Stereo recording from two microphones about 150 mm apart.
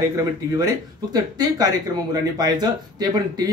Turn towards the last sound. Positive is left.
turn(degrees=-25)  # may be behind; listen again after turning